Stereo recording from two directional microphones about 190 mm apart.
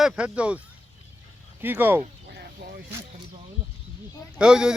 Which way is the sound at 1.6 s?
10° right (ahead or behind).